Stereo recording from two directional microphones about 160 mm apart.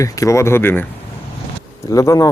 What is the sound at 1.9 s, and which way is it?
Speech, 20° left (ahead or behind).